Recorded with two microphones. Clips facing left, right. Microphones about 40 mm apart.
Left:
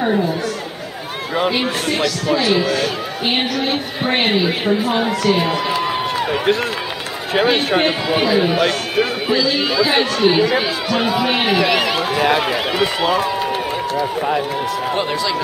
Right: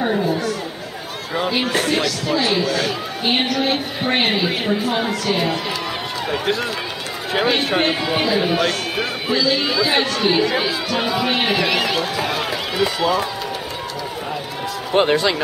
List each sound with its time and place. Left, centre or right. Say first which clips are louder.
0.0 s a woman's voice: left 1 dB; centre
7.3 s a man's voice: left 3 dB; centre
12.2 s speech: left 6 dB; left
15.0 s speech: right 9 dB; right